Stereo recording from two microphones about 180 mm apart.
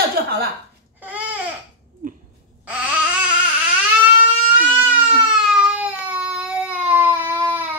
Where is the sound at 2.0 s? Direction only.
50° right (ahead or behind).